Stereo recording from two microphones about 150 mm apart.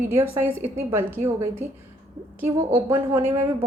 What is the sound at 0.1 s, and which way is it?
A woman's voice, 15° right (ahead or behind).